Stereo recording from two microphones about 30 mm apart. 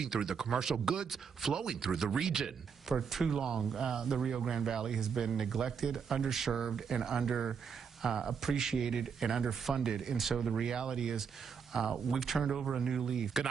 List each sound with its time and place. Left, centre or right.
0.0 s speech: centre
10.6 s speech: right